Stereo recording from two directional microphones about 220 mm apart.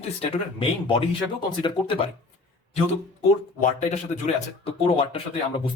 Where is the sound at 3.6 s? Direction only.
35° left (ahead or behind).